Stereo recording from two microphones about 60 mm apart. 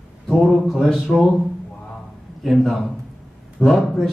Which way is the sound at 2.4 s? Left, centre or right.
Centre.